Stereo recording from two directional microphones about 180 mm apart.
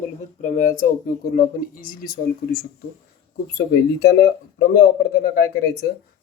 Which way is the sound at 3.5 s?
65° left (ahead or behind).